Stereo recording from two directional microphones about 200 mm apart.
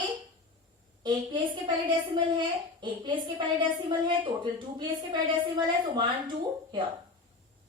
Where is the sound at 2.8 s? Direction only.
25° right (ahead or behind).